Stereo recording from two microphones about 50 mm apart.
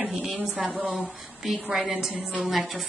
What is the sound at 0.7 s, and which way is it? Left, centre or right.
Speech, right.